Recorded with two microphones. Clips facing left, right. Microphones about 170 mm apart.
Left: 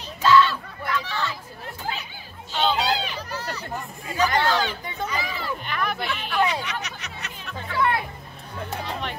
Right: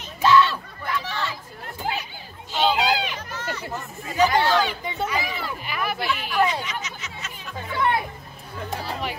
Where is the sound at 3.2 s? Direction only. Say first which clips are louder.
Left 2 dB; 35° left (ahead or behind).